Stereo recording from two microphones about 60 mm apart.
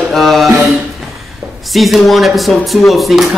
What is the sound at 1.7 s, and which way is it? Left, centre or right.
Speech, centre.